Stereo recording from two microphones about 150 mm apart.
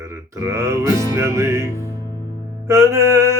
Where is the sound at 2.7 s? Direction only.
20° right (ahead or behind).